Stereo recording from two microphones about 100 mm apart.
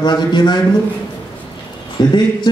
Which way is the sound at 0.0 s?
50° left (ahead or behind).